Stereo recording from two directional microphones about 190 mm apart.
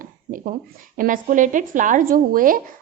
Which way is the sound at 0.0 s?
45° right (ahead or behind).